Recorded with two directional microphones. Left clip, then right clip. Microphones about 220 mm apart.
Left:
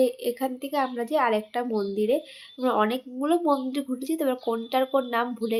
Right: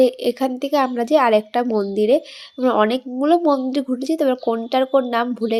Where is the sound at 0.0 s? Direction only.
30° right (ahead or behind).